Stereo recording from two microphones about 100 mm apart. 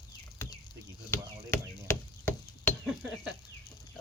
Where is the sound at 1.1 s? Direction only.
25° left (ahead or behind).